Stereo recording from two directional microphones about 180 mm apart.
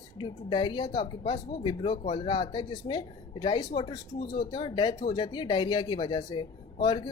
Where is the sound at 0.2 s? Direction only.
25° left (ahead or behind).